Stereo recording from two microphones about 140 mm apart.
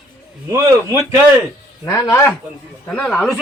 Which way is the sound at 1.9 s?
20° left (ahead or behind).